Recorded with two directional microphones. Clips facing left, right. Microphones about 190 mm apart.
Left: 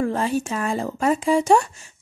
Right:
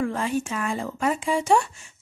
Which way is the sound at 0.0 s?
35° left (ahead or behind).